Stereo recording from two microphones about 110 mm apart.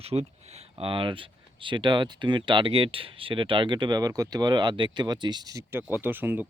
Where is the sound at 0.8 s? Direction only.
55° right (ahead or behind).